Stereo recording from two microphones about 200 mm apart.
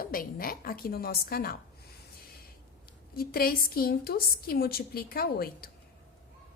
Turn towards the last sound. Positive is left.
turn(degrees=50)  # may be behind; listen again after turning